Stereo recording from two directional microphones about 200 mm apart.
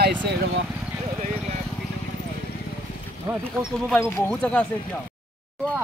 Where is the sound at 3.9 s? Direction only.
10° left (ahead or behind).